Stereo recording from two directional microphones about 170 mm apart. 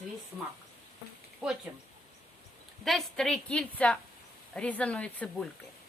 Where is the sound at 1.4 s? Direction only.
Centre (ahead or behind).